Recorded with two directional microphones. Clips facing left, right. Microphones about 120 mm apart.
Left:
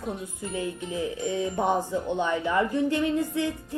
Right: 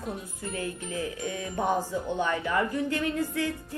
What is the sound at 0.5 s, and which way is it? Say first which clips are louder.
A woman's voice: left 3 dB; 20° left (ahead or behind).